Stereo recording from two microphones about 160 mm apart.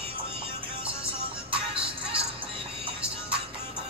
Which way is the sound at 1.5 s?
35° right (ahead or behind).